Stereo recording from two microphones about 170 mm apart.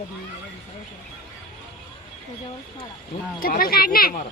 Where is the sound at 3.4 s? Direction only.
60° left (ahead or behind).